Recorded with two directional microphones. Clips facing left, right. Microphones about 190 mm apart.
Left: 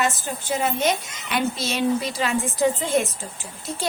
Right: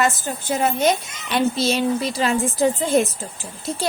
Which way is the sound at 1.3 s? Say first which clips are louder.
Right 5 dB; 30° right (ahead or behind).